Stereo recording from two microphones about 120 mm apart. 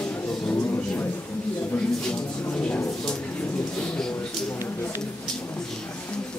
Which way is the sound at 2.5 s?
10° left (ahead or behind).